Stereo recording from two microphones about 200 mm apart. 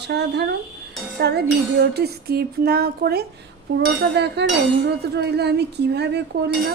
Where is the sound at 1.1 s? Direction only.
55° right (ahead or behind).